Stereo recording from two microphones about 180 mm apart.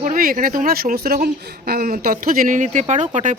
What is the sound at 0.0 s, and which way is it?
Speech, 50° right (ahead or behind).